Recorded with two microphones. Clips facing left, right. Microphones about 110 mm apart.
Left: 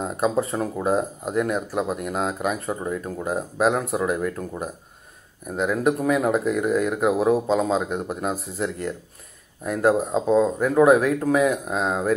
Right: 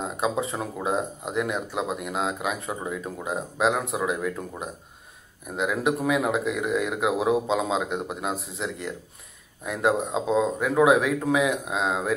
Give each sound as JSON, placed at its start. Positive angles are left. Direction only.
{"t": 0.0, "sound": "speech", "side_deg": 0}